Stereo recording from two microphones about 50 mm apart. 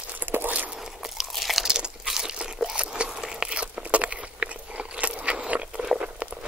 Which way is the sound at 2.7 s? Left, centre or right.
Right.